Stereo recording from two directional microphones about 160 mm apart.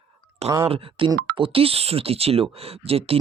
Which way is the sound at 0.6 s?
35° right (ahead or behind).